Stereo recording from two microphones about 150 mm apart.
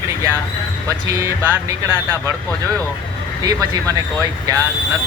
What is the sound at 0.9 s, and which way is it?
Speech, 20° right (ahead or behind).